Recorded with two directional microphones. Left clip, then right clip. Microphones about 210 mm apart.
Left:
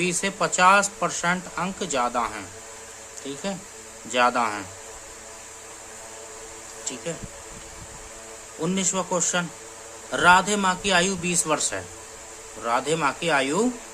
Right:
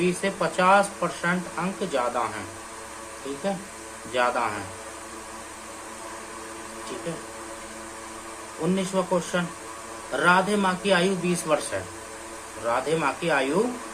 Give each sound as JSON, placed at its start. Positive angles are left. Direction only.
{"t": 0.0, "sound": "speech", "side_deg": 50}
{"t": 3.4, "sound": "speech", "side_deg": 45}
{"t": 8.7, "sound": "speech", "side_deg": 45}